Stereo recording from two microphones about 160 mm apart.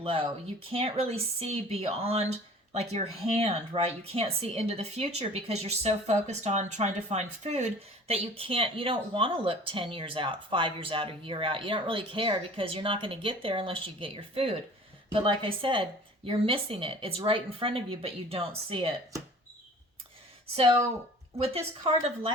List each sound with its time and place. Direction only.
0.0 s a woman's voice: 35° right (ahead or behind)
21.3 s a woman's voice: 40° right (ahead or behind)